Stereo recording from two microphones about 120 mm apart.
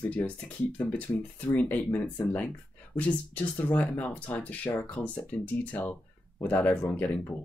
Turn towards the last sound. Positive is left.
turn(degrees=15)  # may be behind; listen again after turning